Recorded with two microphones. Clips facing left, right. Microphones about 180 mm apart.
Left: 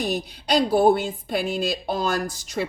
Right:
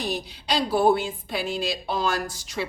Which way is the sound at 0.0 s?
50° left (ahead or behind).